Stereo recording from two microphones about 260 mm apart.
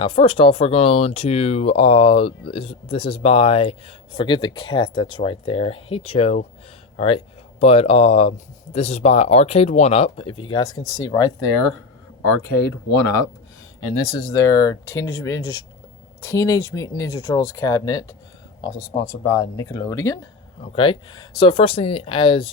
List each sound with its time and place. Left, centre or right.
0.0 s speech: left
13.9 s speech: centre
19.2 s speech: centre